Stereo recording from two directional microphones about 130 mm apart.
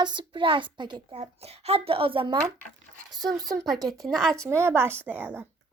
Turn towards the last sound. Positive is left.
turn(degrees=-15)  # may be behind; listen again after turning